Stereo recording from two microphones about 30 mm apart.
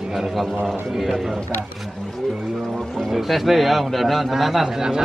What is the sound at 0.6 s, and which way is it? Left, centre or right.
Speech, centre.